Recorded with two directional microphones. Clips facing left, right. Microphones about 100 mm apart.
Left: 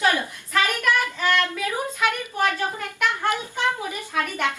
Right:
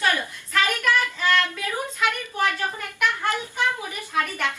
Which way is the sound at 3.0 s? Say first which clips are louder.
Left 1 dB; 20° left (ahead or behind).